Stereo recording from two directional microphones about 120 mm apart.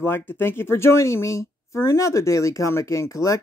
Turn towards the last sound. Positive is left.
turn(degrees=25)  # may be behind; listen again after turning